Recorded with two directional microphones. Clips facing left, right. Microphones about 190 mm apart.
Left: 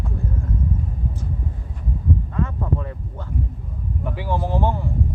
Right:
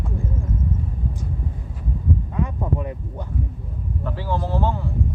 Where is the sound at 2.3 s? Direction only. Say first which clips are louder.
Even; 15° right (ahead or behind).